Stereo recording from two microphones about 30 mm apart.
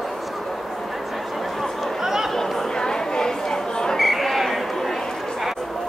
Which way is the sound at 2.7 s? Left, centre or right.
Left.